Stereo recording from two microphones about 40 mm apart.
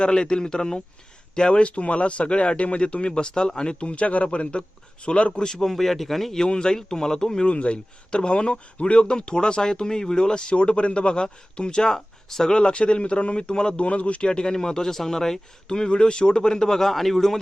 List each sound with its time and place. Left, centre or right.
0.0 s speech: left
5.5 s speech: centre
6.4 s speech: centre
7.4 s speech: left; by 12.5 s centre
12.5 s speech: left
13.8 s speech: left; by 17.4 s centre